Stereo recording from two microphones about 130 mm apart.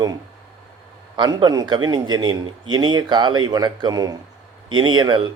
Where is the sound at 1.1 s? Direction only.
35° right (ahead or behind).